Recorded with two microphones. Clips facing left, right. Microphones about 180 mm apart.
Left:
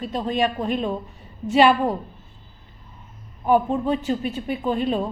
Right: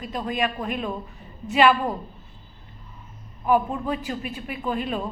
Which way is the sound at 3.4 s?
30° left (ahead or behind).